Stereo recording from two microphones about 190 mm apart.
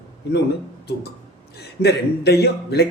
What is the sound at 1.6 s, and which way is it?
Speech, 60° left (ahead or behind).